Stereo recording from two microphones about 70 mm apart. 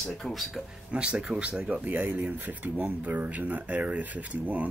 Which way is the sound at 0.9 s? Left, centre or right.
Centre.